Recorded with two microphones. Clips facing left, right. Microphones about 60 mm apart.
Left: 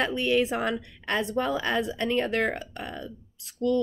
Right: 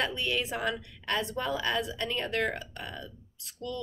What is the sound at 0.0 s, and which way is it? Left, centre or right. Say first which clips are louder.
Speech: left 7 dB; left.